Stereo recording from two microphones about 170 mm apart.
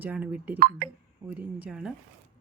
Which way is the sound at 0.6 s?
60° right (ahead or behind).